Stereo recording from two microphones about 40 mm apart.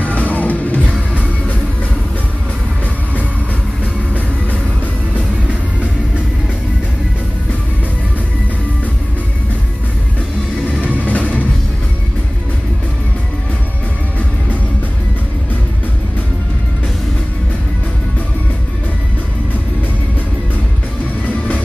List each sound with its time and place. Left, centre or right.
0.0 s music: left
5.5 s music: right
10.8 s music: right
11.1 s music: left
21.3 s music: left